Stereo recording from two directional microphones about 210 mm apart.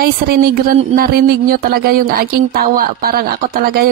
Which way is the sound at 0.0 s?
45° right (ahead or behind).